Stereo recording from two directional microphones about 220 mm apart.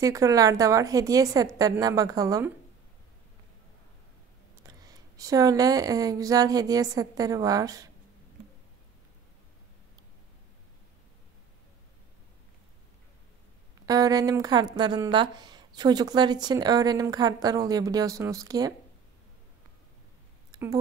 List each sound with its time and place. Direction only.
0.0 s a woman's voice: 15° right (ahead or behind)
4.6 s a woman's voice: 15° right (ahead or behind)
13.8 s a woman's voice: 15° right (ahead or behind)